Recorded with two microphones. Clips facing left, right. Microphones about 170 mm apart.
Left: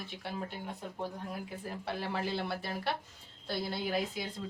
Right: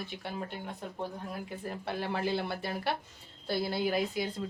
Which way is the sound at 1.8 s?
Centre (ahead or behind).